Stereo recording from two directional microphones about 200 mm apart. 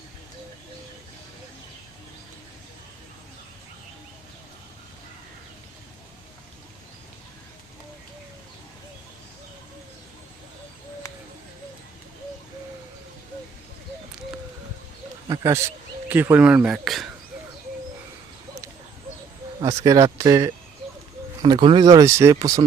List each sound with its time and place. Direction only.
15.3 s speech: 15° right (ahead or behind)
19.6 s speech: 15° right (ahead or behind)